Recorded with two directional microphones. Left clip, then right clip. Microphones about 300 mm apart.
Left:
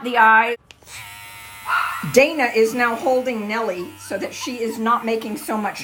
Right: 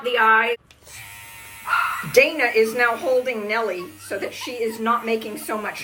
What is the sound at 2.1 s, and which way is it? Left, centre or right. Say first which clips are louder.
A woman's voice: left 1 dB; left.